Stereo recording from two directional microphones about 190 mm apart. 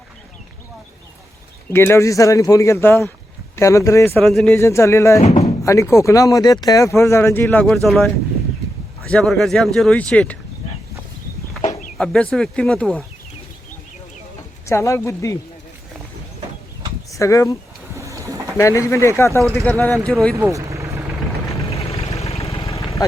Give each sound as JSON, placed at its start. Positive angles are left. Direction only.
{"t": 1.7, "sound": "speech", "side_deg": 15}
{"t": 4.2, "sound": "speech", "side_deg": 0}
{"t": 4.5, "sound": "speech", "side_deg": 15}
{"t": 11.9, "sound": "speech", "side_deg": 5}
{"t": 14.7, "sound": "speech", "side_deg": 15}
{"t": 17.1, "sound": "speech", "side_deg": 15}
{"t": 17.9, "sound": "bird", "side_deg": -15}
{"t": 18.5, "sound": "speech", "side_deg": 15}
{"t": 19.5, "sound": "speech", "side_deg": 0}
{"t": 20.3, "sound": "vehicle", "side_deg": -15}
{"t": 21.7, "sound": "vehicle", "side_deg": 30}
{"t": 23.0, "sound": "speech", "side_deg": 20}